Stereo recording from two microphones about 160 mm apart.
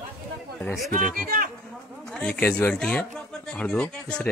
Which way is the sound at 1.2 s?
65° right (ahead or behind).